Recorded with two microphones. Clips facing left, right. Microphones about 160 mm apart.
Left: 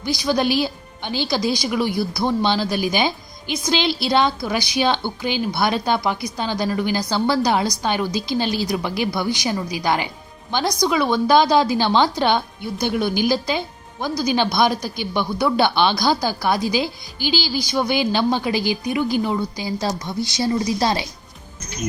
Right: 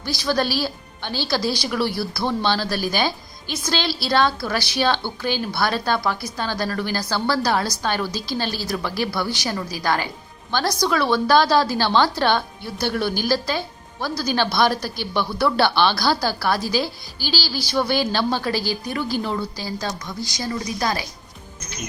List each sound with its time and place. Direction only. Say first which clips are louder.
0.0 s speech: left 2 dB; 15° left (ahead or behind)
19.8 s a woman's voice: left 5 dB; 30° left (ahead or behind)